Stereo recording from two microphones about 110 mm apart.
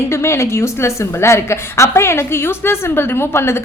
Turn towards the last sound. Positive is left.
turn(degrees=25)  # may be behind; listen again after turning